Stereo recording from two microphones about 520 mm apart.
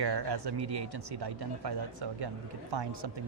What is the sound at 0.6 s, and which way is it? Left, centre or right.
Speech, right.